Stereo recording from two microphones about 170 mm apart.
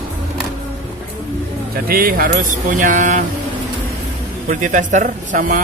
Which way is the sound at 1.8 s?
60° right (ahead or behind).